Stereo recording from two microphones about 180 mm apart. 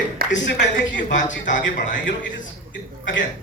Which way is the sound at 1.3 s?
90° left.